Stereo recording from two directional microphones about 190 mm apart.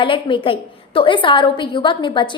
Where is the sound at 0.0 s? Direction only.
25° left (ahead or behind).